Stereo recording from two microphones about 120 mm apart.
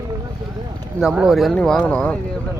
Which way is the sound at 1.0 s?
Centre (ahead or behind).